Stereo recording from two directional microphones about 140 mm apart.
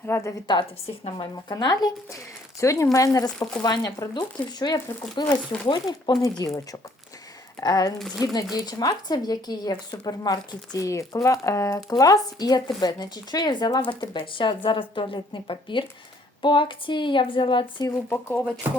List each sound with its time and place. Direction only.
0.0 s speech: 20° left (ahead or behind)
1.0 s speech: 35° left (ahead or behind)
3.3 s speech: 5° left (ahead or behind)
3.6 s speech: 30° left (ahead or behind)
7.9 s speech: centre (ahead or behind)
8.2 s speech: 25° left (ahead or behind)
17.9 s speech: 15° left (ahead or behind)